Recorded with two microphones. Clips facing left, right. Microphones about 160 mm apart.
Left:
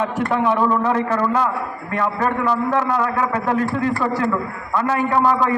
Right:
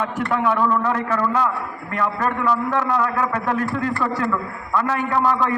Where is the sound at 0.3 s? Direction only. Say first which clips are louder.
Left 1 dB; 25° left (ahead or behind).